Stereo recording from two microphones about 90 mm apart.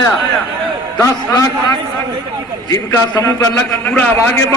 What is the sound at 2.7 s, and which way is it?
Speech, 35° left (ahead or behind).